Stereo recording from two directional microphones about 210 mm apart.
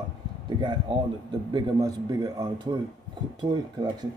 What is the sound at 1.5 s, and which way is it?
Speech, 15° right (ahead or behind).